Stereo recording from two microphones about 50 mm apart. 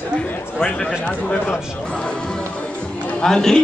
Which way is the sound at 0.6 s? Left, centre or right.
Centre.